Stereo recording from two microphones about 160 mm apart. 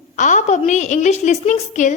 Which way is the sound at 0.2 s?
50° left (ahead or behind).